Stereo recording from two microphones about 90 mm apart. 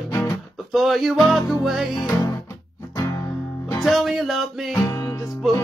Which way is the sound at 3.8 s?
Centre (ahead or behind).